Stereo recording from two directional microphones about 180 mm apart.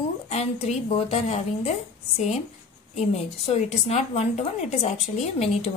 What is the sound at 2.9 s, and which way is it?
A woman's voice, 35° left (ahead or behind).